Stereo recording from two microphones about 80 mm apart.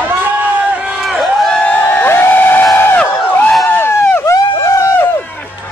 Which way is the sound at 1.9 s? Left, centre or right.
Left.